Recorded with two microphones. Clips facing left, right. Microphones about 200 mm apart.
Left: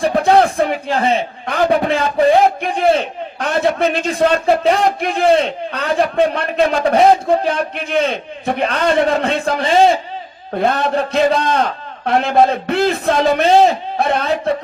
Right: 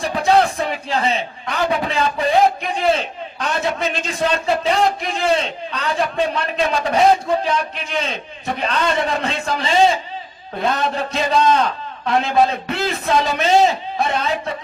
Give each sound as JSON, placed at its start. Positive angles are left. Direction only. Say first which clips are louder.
{"t": 0.0, "sound": "a man's voice", "louder": "left 4 dB", "side_deg": 55}